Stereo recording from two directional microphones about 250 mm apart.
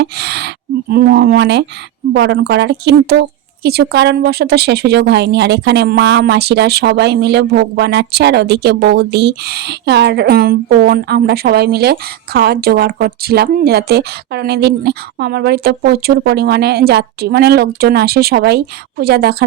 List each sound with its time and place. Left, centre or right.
0.0 s a woman's voice: right